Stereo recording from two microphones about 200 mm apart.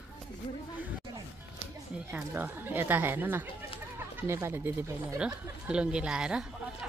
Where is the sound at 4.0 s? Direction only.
10° right (ahead or behind).